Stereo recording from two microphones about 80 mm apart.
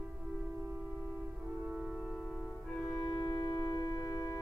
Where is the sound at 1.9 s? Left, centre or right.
Centre.